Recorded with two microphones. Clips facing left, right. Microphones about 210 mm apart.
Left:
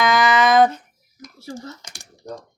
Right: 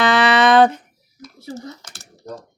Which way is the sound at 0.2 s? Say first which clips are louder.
Right 2 dB; 75° right (ahead or behind).